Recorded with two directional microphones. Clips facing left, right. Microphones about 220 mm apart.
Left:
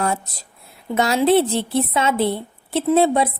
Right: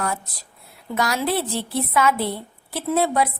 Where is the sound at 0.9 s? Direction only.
25° left (ahead or behind).